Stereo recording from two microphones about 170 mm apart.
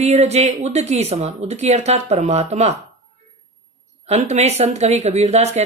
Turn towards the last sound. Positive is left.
turn(degrees=-40)  # may be behind; listen again after turning